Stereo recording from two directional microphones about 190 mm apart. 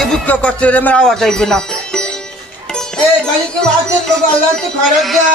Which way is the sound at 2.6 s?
5° left (ahead or behind).